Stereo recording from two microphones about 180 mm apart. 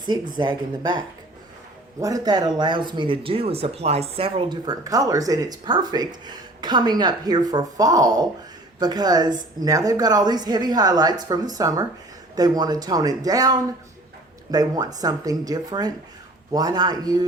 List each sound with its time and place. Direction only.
0.3 s speech: 25° right (ahead or behind)